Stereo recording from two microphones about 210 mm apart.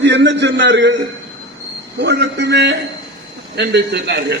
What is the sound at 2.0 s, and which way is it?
A man's voice, 55° right (ahead or behind).